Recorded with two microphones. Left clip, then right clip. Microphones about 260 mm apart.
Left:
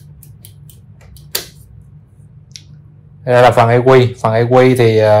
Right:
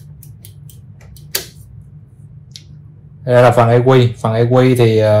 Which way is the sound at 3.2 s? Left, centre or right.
Left.